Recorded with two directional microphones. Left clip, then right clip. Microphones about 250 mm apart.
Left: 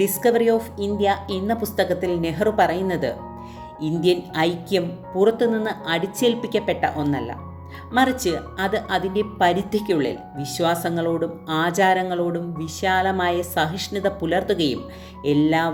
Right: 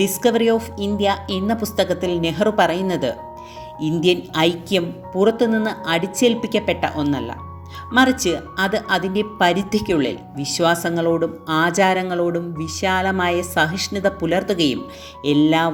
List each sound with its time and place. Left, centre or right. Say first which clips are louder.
0.0 s speech: right 1 dB; centre
2.0 s a woman's voice: right 2 dB; centre
2.4 s speech: right 2 dB; centre
8.2 s speech: right 3 dB; centre